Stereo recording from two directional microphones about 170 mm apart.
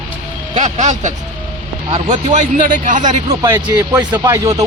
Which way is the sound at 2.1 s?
45° right (ahead or behind).